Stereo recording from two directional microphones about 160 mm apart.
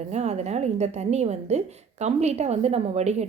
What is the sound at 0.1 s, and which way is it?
A woman's voice, 45° right (ahead or behind).